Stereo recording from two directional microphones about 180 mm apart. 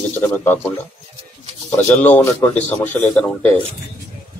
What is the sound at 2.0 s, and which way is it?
Speech, 10° left (ahead or behind).